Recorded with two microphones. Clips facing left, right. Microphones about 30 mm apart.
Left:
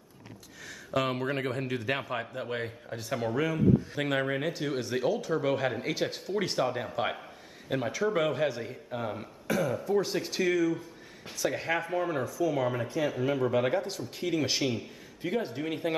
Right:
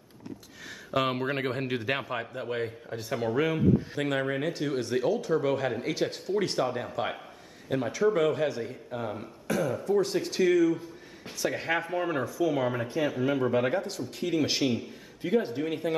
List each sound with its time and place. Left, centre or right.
0.9 s speech: centre
1.9 s speech: centre